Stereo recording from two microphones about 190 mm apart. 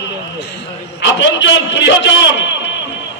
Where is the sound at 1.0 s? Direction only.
70° left (ahead or behind).